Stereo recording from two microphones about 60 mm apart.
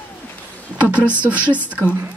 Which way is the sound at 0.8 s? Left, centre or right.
Right.